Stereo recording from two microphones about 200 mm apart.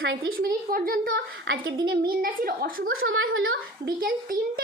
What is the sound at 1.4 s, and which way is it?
Speech, 70° right (ahead or behind).